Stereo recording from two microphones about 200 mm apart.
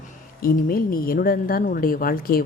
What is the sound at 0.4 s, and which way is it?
A woman's voice, 45° left (ahead or behind).